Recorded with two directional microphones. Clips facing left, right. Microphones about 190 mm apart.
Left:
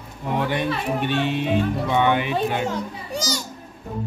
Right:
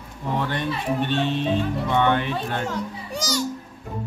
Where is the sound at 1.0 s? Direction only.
10° left (ahead or behind).